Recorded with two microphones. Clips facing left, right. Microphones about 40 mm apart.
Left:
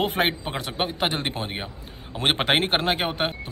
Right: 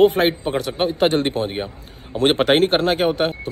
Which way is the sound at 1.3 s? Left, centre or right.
Centre.